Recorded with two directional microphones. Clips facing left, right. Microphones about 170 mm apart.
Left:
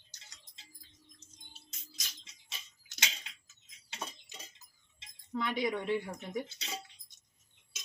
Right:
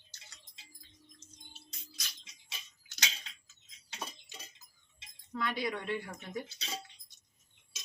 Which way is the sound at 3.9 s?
5° right (ahead or behind).